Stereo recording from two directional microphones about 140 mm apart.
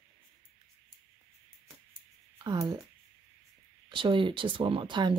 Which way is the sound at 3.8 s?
35° right (ahead or behind).